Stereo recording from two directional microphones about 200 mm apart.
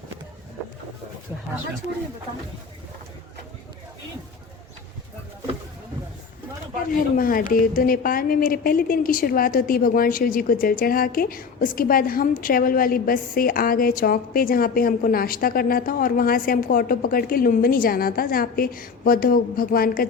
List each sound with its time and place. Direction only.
6.9 s a woman's voice: 45° left (ahead or behind)